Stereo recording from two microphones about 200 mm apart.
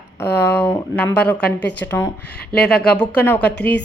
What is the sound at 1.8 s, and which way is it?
Speech, 10° left (ahead or behind).